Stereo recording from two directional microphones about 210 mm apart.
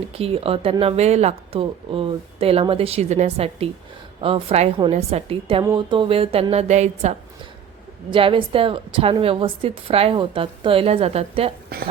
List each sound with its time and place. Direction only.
0.1 s speech: 25° right (ahead or behind)